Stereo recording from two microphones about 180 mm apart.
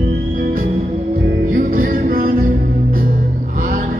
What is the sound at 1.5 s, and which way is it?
Music, 55° right (ahead or behind).